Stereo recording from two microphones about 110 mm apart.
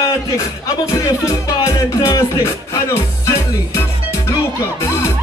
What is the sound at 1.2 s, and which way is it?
Music, 30° left (ahead or behind).